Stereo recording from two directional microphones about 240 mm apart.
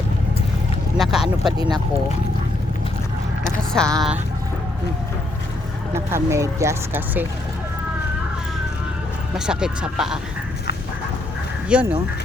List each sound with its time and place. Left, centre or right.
0.9 s a sound: centre
1.5 s speech: centre
3.8 s speech: centre
5.9 s speech: centre
9.3 s speech: centre
11.7 s speech: centre